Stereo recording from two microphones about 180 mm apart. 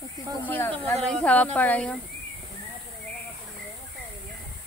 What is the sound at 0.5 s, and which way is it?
Speech, 10° left (ahead or behind).